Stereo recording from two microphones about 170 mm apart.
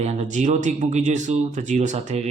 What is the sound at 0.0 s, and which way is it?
Speech, 40° right (ahead or behind).